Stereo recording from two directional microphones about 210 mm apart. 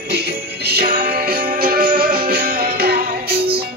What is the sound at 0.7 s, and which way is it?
Music, 45° right (ahead or behind).